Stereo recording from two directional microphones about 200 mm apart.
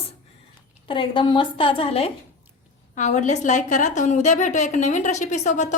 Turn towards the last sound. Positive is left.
turn(degrees=35)  # may be behind; listen again after turning